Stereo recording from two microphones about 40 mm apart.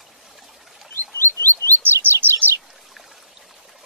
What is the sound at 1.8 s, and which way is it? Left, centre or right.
Chirp, right.